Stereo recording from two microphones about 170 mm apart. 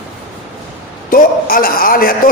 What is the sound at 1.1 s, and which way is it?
A man's voice, 55° left (ahead or behind).